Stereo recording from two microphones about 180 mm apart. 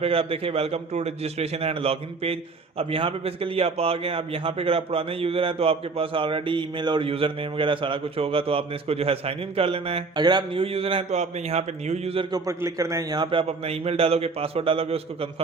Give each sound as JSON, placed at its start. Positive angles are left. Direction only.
{"t": 0.0, "sound": "a man's voice", "side_deg": -30}
{"t": 12.5, "sound": "a man's voice", "side_deg": -15}